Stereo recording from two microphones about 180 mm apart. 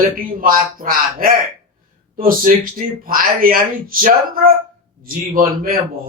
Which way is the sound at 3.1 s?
55° right (ahead or behind).